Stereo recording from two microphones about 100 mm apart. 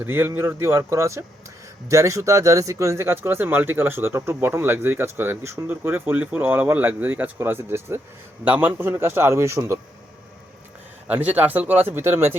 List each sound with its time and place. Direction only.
0.0 s speech: 20° right (ahead or behind)
11.1 s speech: 15° right (ahead or behind)